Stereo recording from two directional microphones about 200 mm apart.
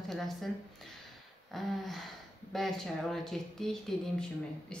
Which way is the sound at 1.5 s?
Centre (ahead or behind).